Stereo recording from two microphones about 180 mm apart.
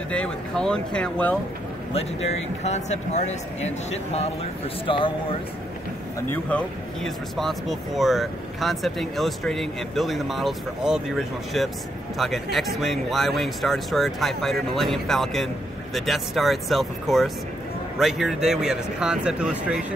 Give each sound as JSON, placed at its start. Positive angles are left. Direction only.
{"t": 0.1, "sound": "speech", "side_deg": 5}
{"t": 2.0, "sound": "speech", "side_deg": 35}
{"t": 6.2, "sound": "speech", "side_deg": 10}